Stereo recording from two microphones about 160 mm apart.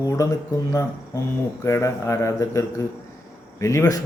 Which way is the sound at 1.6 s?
20° left (ahead or behind).